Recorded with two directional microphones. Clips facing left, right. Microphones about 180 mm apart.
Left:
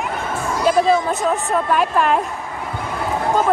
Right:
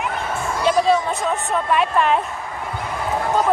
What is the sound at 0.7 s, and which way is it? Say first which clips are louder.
A woman's voice: left 2 dB; centre (ahead or behind).